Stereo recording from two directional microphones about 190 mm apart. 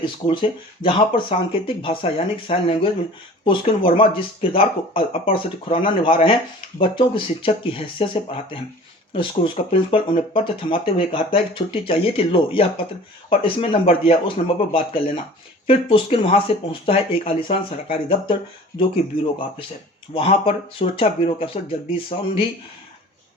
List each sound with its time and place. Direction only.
0.8 s speech: 25° left (ahead or behind)
19.1 s speech: 50° left (ahead or behind)
20.1 s speech: 30° left (ahead or behind)